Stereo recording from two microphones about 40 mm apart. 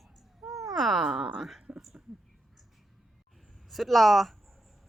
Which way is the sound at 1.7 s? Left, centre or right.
Centre.